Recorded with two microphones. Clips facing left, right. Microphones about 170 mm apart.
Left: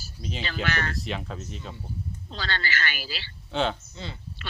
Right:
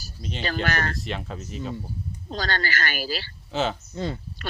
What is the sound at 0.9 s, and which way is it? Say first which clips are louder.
Speech: right 1 dB; centre (ahead or behind).